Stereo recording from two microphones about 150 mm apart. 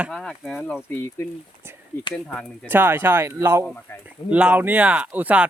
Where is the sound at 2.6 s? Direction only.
15° right (ahead or behind).